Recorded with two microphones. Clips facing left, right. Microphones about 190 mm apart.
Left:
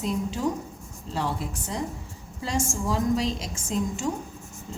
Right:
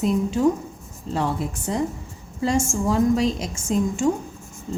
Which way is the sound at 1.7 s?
60° right (ahead or behind).